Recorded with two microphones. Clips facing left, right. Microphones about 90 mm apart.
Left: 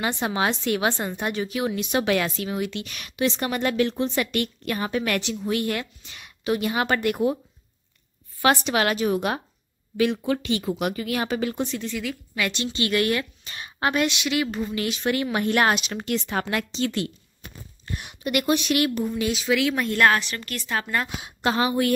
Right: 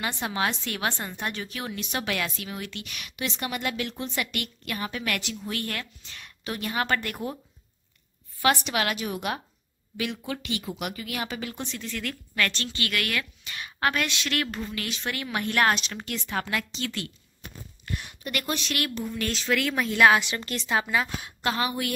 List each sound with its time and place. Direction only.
0.0 s a woman's voice: 25° left (ahead or behind)
8.4 s speech: 30° left (ahead or behind)
11.9 s a woman's voice: 5° left (ahead or behind)
14.3 s speech: 5° left (ahead or behind)
15.9 s a woman's voice: 25° left (ahead or behind)
16.7 s a woman's voice: 25° left (ahead or behind); by 20.2 s 5° right (ahead or behind)
20.2 s a woman's voice: 20° right (ahead or behind)
20.8 s a woman's voice: 5° right (ahead or behind)
21.2 s a woman's voice: 25° left (ahead or behind)